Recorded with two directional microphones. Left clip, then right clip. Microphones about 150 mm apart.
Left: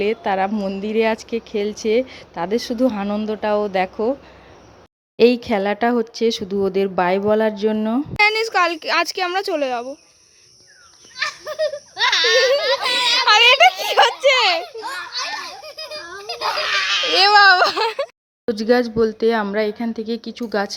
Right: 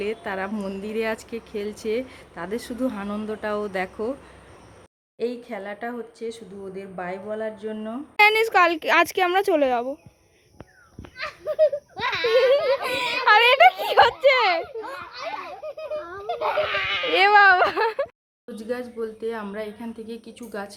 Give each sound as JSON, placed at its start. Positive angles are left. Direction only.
{"t": 0.0, "sound": "a woman's voice", "side_deg": 25}
{"t": 5.1, "sound": "speech", "side_deg": 55}
{"t": 8.1, "sound": "speech", "side_deg": -5}
{"t": 8.8, "sound": "speech", "side_deg": -20}
{"t": 11.2, "sound": "a sound", "side_deg": 0}
{"t": 12.2, "sound": "a child's voice", "side_deg": 0}
{"t": 16.0, "sound": "children playing", "side_deg": 70}
{"t": 16.3, "sound": "goat", "side_deg": 30}
{"t": 17.1, "sound": "speech", "side_deg": 5}
{"t": 18.4, "sound": "speech", "side_deg": 45}